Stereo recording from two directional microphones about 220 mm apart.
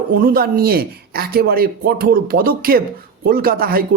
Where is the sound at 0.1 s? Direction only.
40° right (ahead or behind).